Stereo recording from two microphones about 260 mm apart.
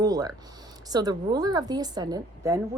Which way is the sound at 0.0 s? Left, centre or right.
Centre.